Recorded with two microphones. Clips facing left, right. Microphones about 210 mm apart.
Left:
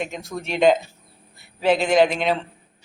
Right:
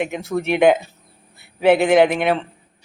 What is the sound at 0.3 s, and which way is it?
Speech, 65° right (ahead or behind).